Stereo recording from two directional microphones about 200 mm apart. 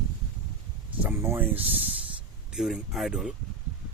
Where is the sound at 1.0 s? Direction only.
10° right (ahead or behind).